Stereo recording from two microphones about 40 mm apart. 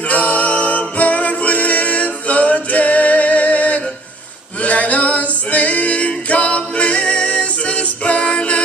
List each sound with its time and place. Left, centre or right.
0.1 s music: left
4.6 s male singing: left